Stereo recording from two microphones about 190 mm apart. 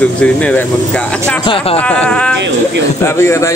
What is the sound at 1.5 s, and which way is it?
Speech, 30° left (ahead or behind).